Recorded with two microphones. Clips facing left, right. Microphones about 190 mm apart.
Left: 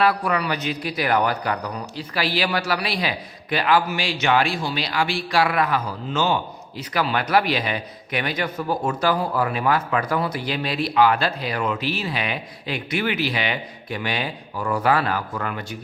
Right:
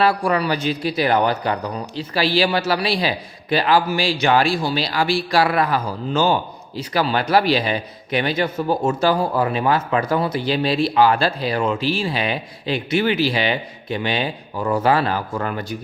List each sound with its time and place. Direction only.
0.0 s speech: 30° right (ahead or behind)